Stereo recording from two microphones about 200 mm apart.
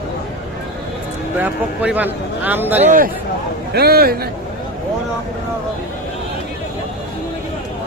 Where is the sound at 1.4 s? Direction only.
5° right (ahead or behind).